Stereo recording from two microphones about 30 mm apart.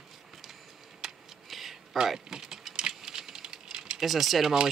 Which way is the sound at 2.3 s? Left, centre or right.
Centre.